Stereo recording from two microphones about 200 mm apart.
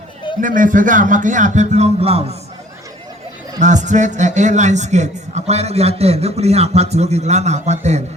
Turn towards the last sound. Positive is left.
turn(degrees=-35)  # may be behind; listen again after turning